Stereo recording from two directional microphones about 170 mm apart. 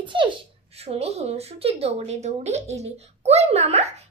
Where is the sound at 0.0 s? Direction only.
30° right (ahead or behind).